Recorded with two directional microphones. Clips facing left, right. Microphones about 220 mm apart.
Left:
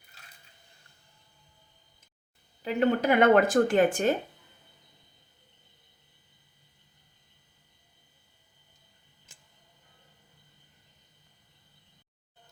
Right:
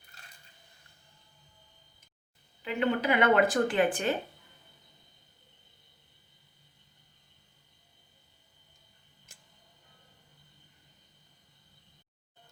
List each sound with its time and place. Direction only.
2.6 s a woman's voice: 45° left (ahead or behind)